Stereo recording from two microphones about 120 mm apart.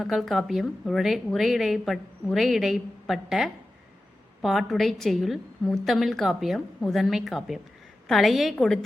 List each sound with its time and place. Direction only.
0.0 s a woman's voice: centre (ahead or behind)